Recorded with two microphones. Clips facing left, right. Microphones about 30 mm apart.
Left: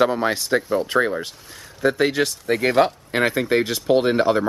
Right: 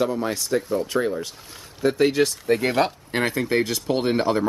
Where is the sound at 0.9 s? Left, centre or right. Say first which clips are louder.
Left 3 dB; left.